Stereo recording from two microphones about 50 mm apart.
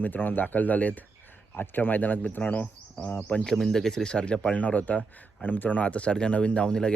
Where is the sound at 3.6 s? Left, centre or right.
Centre.